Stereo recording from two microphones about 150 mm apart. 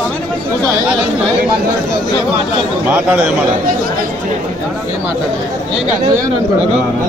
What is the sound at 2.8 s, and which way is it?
Speech, 10° right (ahead or behind).